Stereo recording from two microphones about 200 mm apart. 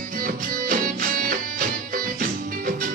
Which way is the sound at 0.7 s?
45° right (ahead or behind).